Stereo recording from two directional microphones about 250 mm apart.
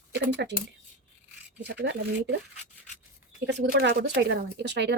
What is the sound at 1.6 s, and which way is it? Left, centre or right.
Speech, right.